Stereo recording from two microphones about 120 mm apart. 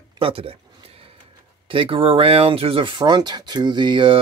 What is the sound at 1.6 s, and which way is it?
Speech, 45° right (ahead or behind).